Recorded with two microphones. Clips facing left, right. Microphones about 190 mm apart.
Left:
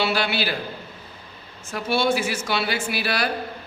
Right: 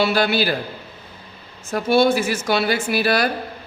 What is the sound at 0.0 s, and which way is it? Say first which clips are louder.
Speech: right 5 dB; 45° right (ahead or behind).